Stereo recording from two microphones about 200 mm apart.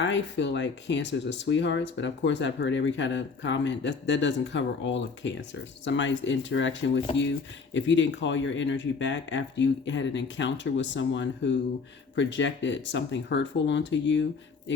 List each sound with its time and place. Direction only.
0.0 s speech: 65° left (ahead or behind)